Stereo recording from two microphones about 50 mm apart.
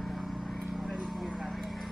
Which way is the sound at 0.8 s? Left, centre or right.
Centre.